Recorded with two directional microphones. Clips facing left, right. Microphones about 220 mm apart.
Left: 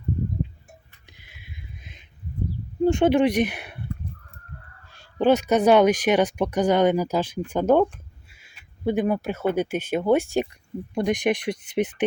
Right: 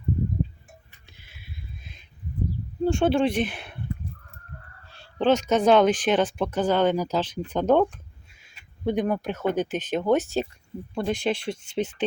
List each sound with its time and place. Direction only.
1.2 s a sound: 15° left (ahead or behind)
2.8 s speech: 15° left (ahead or behind)
5.2 s speech: 10° left (ahead or behind)